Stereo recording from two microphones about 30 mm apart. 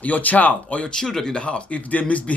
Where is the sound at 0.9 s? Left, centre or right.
Centre.